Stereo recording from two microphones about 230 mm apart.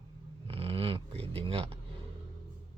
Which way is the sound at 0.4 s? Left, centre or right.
Right.